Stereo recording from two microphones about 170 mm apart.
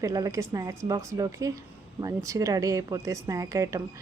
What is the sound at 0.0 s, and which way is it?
Speech, 20° right (ahead or behind).